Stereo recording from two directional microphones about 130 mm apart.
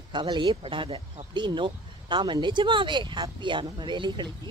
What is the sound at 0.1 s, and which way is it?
Speech, 35° right (ahead or behind).